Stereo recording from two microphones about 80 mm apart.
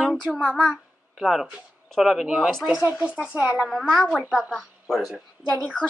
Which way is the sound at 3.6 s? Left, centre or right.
Centre.